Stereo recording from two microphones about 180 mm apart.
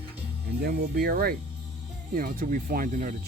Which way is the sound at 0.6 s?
55° right (ahead or behind).